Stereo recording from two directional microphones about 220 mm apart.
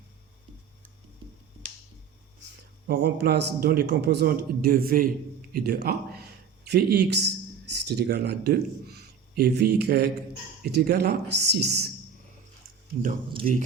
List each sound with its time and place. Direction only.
2.8 s a man's voice: 45° right (ahead or behind)
12.9 s speech: 40° right (ahead or behind)